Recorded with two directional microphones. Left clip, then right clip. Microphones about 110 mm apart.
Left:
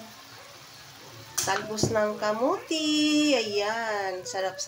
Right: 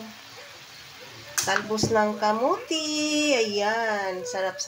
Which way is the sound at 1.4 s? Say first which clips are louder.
Right 3 dB; 35° right (ahead or behind).